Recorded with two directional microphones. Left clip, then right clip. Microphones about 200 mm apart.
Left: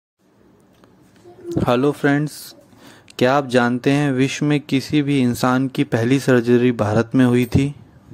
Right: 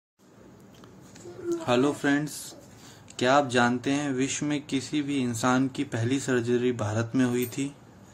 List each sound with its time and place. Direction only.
1.5 s speech: 45° left (ahead or behind)